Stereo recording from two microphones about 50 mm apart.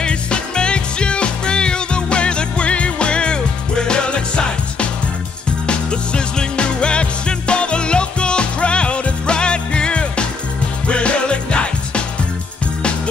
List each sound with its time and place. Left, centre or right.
0.0 s music: centre
5.7 s music: centre